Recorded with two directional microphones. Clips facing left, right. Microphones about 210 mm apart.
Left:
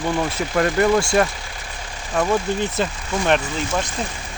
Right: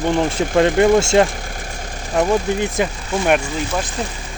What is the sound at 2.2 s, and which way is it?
Speech, 15° right (ahead or behind).